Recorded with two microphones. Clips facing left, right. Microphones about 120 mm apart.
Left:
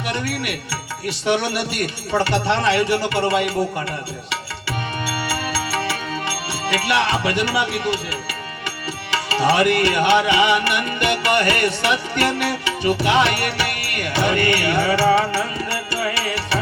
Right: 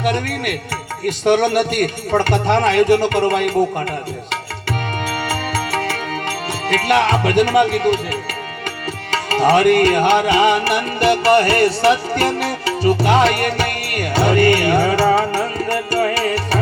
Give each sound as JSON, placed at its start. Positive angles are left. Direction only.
{"t": 0.0, "sound": "speech", "side_deg": -50}
{"t": 5.0, "sound": "music", "side_deg": -50}
{"t": 9.0, "sound": "music", "side_deg": -50}